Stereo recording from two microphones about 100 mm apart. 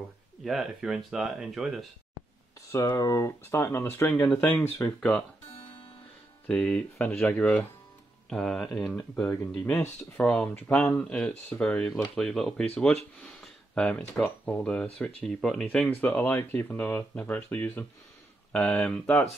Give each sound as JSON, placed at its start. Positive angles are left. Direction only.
{"t": 0.4, "sound": "speech", "side_deg": -5}
{"t": 2.7, "sound": "speech", "side_deg": 35}
{"t": 4.8, "sound": "speech", "side_deg": 10}
{"t": 6.4, "sound": "speech", "side_deg": 10}
{"t": 9.1, "sound": "speech", "side_deg": 20}
{"t": 10.1, "sound": "speech", "side_deg": 5}